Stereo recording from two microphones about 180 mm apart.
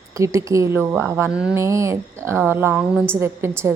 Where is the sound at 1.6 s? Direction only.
15° right (ahead or behind).